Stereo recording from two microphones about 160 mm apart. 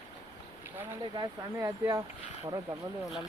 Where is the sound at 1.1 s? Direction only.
25° right (ahead or behind).